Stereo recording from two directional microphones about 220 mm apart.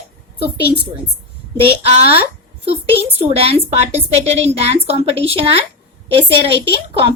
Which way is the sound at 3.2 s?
25° right (ahead or behind).